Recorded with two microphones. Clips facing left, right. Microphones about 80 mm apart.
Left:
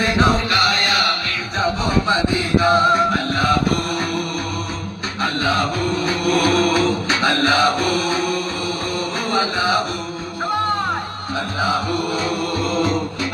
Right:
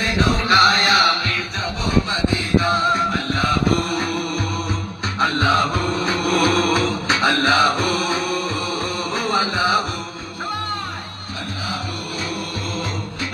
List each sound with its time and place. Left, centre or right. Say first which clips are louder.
0.4 s music: right 3 dB; right
2.6 s music: left 7 dB; centre
5.2 s music: right 2 dB; centre
9.3 s music: even; centre